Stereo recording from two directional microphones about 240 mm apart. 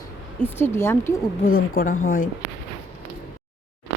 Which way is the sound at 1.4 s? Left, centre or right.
Left.